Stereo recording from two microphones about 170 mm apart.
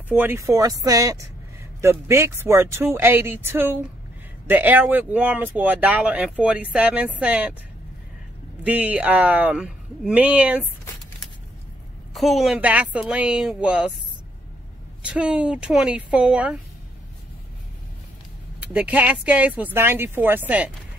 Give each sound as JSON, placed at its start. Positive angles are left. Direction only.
{"t": 0.1, "sound": "speech", "side_deg": -10}
{"t": 8.6, "sound": "speech", "side_deg": -10}
{"t": 12.1, "sound": "speech", "side_deg": 0}
{"t": 15.0, "sound": "speech", "side_deg": -5}
{"t": 18.6, "sound": "speech", "side_deg": -10}